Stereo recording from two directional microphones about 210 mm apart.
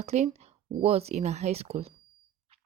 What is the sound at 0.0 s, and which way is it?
Speech, 30° right (ahead or behind).